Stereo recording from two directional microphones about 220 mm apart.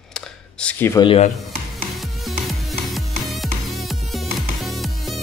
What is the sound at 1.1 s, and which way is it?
Speech, 30° left (ahead or behind).